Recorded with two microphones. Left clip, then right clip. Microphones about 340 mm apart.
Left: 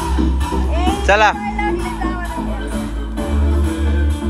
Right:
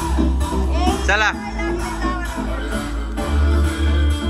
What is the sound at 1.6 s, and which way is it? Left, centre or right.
Music, left.